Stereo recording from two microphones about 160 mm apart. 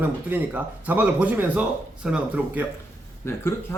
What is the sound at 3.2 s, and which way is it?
Speech, 15° left (ahead or behind).